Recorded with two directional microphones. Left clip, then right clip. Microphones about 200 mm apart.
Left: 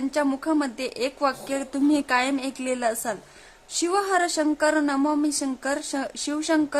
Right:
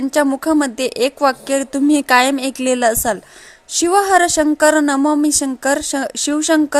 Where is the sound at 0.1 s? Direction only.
25° right (ahead or behind).